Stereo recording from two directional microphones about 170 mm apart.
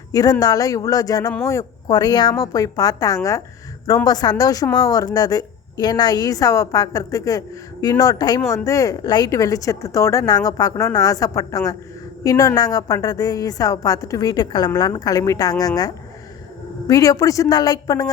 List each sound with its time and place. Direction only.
0.1 s speech: 20° left (ahead or behind)